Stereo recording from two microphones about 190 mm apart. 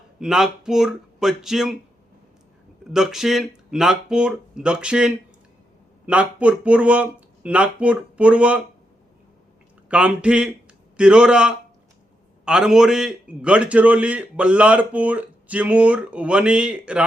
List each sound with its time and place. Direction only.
0.2 s speech: 5° right (ahead or behind)
2.9 s a man's voice: centre (ahead or behind)
9.9 s a man's voice: 5° right (ahead or behind)